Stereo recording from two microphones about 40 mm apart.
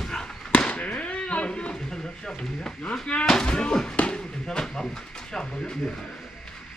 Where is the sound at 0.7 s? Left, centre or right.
Left.